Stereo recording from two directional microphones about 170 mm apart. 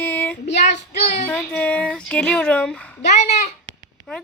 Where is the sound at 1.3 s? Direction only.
5° left (ahead or behind).